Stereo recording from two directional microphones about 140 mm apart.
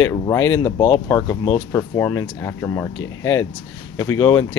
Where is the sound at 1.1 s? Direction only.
20° left (ahead or behind).